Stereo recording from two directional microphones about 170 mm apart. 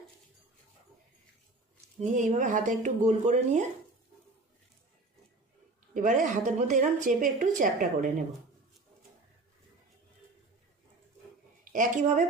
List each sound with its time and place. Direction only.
2.0 s a woman's voice: 45° right (ahead or behind)
5.9 s a woman's voice: 50° right (ahead or behind)
11.7 s a woman's voice: 50° right (ahead or behind)